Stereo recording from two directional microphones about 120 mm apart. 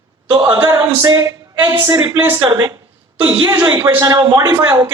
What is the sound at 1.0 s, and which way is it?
A man's voice, 30° right (ahead or behind).